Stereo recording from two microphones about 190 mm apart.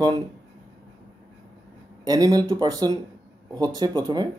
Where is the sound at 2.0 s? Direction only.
20° right (ahead or behind).